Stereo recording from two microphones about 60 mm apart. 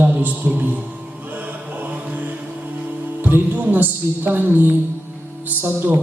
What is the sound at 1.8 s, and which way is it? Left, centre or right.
Mantra, right.